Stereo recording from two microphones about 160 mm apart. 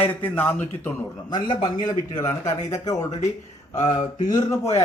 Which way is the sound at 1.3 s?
25° left (ahead or behind).